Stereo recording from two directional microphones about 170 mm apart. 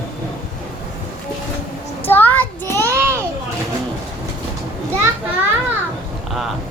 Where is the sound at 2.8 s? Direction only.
15° right (ahead or behind).